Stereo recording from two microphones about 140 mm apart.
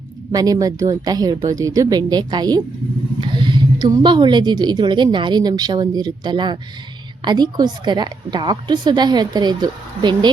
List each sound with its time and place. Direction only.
0.3 s a woman's voice: 25° right (ahead or behind)